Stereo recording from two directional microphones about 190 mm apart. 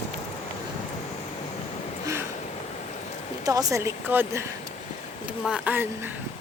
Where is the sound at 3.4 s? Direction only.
20° right (ahead or behind).